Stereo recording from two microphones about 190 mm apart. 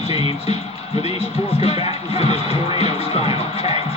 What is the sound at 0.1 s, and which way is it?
Music, 30° left (ahead or behind).